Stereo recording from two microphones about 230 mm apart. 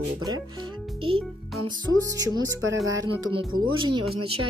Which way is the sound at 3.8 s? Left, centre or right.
Centre.